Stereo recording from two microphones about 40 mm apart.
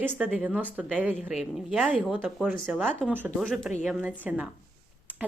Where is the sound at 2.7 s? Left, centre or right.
Centre.